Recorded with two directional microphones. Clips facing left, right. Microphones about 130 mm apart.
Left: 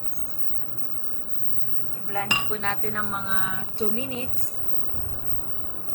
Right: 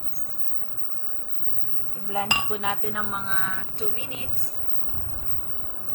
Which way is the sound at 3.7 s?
35° left (ahead or behind).